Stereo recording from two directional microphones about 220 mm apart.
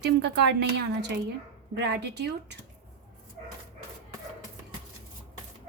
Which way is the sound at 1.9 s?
50° right (ahead or behind).